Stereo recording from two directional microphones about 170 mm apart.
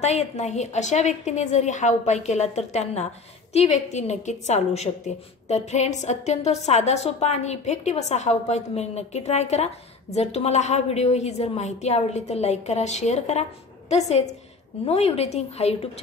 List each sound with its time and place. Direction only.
0.0 s a woman's voice: 40° left (ahead or behind)